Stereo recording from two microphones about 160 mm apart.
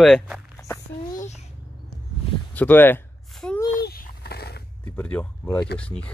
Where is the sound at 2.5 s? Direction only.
10° left (ahead or behind).